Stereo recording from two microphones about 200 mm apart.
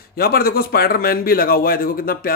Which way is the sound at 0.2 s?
50° left (ahead or behind).